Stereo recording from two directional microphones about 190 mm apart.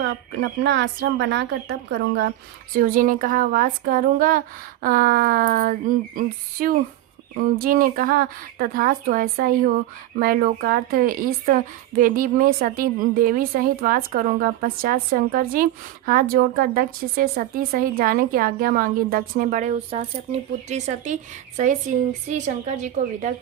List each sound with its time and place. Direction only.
0.6 s a woman's voice: 65° right (ahead or behind)
2.7 s a woman's voice: 45° right (ahead or behind)